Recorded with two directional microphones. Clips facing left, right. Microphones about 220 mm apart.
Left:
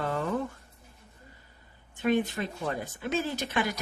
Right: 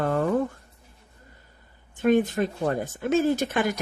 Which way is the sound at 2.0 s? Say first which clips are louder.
Right 6 dB; 50° right (ahead or behind).